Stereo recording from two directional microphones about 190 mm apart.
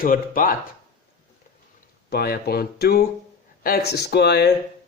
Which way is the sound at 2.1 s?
55° left (ahead or behind).